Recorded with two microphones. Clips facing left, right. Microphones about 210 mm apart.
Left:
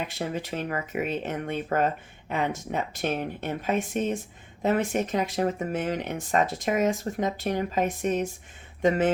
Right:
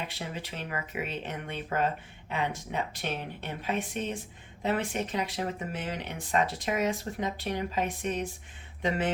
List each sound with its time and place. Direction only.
0.1 s speech: 45° left (ahead or behind)